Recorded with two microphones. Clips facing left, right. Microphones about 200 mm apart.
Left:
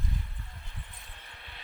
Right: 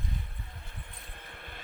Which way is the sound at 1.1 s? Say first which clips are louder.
Right 5 dB; 50° right (ahead or behind).